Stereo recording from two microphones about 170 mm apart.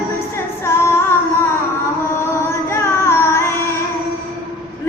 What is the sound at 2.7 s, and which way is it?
Child singing, 15° left (ahead or behind).